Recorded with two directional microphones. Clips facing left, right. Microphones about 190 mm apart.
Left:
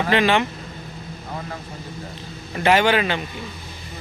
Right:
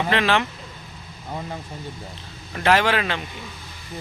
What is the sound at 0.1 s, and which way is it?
Speech, centre (ahead or behind).